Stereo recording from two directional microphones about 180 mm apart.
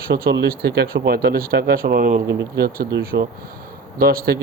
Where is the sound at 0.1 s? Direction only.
60° right (ahead or behind).